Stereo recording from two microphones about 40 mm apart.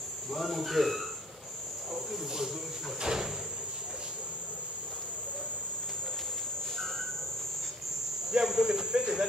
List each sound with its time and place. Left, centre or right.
0.3 s speech: centre
2.1 s speech: centre
8.3 s speech: centre